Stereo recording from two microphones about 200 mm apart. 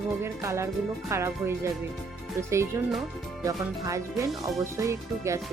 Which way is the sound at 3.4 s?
15° right (ahead or behind).